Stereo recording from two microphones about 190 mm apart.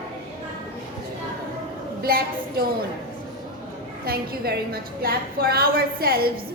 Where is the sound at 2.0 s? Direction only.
55° right (ahead or behind).